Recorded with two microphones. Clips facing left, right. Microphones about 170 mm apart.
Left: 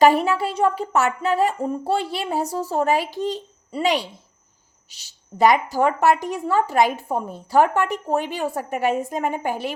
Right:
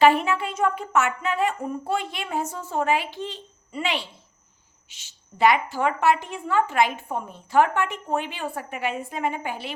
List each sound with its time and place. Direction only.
0.0 s a woman's voice: 40° left (ahead or behind)